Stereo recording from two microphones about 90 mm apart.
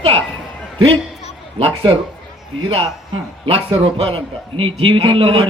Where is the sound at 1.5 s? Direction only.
90° right.